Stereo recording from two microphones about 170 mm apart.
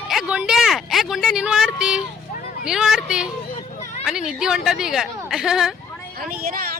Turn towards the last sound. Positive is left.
turn(degrees=-60)  # may be behind; listen again after turning